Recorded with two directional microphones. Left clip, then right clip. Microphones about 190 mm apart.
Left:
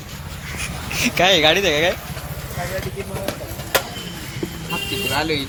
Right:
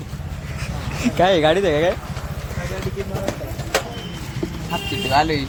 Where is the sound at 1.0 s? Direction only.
15° right (ahead or behind).